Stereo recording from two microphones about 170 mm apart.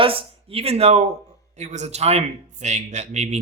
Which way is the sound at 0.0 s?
30° right (ahead or behind).